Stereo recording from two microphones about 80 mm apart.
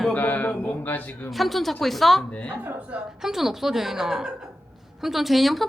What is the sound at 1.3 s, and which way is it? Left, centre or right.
Speech, centre.